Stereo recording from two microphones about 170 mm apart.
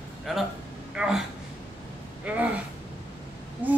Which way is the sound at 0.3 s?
Centre (ahead or behind).